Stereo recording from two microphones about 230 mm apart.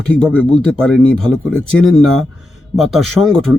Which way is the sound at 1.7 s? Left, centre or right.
Left.